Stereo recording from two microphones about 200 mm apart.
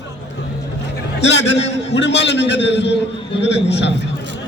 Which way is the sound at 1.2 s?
60° left (ahead or behind).